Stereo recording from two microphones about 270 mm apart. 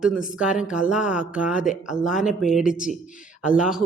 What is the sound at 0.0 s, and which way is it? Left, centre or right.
Speech, centre.